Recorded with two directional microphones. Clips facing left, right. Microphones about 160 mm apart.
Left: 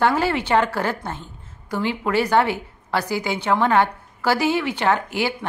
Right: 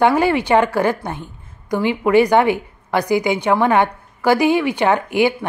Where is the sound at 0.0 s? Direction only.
15° right (ahead or behind).